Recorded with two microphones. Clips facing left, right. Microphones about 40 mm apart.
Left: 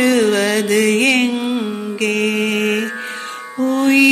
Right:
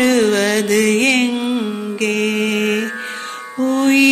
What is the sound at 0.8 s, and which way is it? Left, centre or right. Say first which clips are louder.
Music: left 1 dB; left.